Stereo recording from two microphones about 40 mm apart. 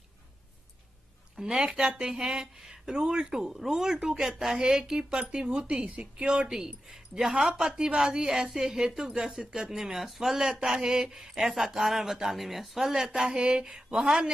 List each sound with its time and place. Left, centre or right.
1.4 s a woman's voice: right
3.3 s a woman's voice: centre